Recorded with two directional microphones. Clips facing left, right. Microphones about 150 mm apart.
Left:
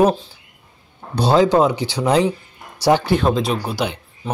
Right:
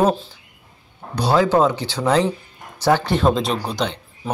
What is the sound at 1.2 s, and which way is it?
Speech, 20° left (ahead or behind).